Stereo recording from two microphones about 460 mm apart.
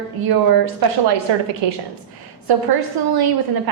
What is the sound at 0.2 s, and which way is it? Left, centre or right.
Speech, right.